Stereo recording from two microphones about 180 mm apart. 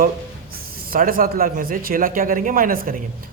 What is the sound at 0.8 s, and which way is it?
A man's voice, 50° right (ahead or behind).